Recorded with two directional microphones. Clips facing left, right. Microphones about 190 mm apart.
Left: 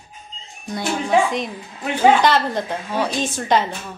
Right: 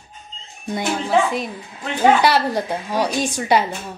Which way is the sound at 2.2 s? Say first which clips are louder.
Even; 10° right (ahead or behind).